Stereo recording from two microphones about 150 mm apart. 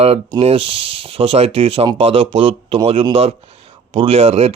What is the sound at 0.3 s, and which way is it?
Speech, 40° right (ahead or behind).